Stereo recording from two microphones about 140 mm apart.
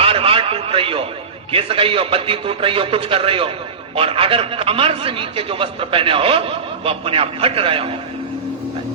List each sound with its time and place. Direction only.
0.0 s radio: 40° right (ahead or behind)
1.5 s a man's voice: 40° right (ahead or behind)